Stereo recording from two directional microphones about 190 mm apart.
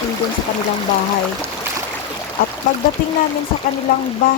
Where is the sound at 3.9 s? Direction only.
50° left (ahead or behind).